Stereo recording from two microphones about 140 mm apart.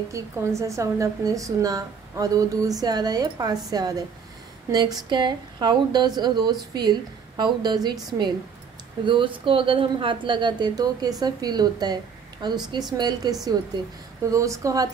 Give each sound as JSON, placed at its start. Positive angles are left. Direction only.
{"t": 0.1, "sound": "a woman's voice", "side_deg": -20}